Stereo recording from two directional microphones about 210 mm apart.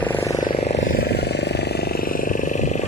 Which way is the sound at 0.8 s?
50° left (ahead or behind).